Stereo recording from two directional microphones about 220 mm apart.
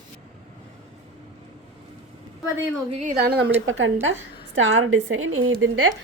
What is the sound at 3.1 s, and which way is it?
Speech, 45° right (ahead or behind).